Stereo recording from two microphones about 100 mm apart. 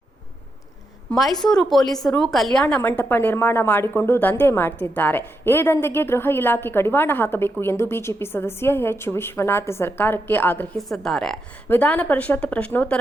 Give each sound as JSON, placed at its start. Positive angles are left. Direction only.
{"t": 1.1, "sound": "speech", "side_deg": 5}
{"t": 2.6, "sound": "a woman's voice", "side_deg": 15}
{"t": 10.8, "sound": "speech", "side_deg": 5}
{"t": 11.7, "sound": "a woman's voice", "side_deg": 15}